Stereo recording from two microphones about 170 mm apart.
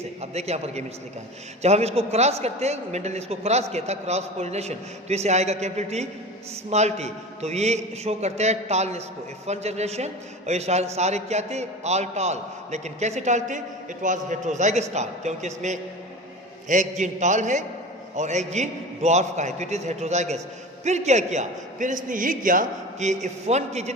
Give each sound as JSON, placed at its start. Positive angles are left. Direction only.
{"t": 0.0, "sound": "a man's voice", "side_deg": -40}